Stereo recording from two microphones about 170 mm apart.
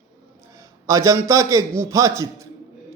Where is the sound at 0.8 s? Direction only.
20° right (ahead or behind).